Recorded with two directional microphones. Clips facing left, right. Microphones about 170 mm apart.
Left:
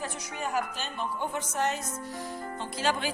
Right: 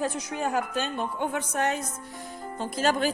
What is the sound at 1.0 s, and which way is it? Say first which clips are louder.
Speech: right 3 dB; 60° right (ahead or behind).